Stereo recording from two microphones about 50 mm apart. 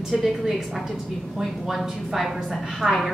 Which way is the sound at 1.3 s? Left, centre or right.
Centre.